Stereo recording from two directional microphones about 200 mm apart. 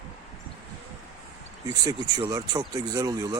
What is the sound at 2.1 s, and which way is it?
Speech, 20° right (ahead or behind).